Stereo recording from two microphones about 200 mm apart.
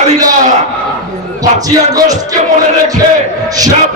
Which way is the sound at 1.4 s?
20° right (ahead or behind).